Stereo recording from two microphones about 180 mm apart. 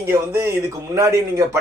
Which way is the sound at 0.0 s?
15° right (ahead or behind).